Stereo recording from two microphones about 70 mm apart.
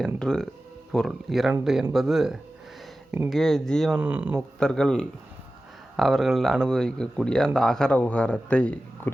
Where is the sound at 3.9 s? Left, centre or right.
Right.